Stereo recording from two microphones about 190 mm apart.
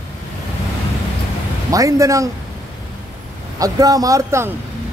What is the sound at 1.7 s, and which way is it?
Speech, 15° right (ahead or behind).